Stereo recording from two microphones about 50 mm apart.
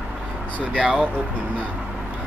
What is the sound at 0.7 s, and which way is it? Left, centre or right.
Speech, right.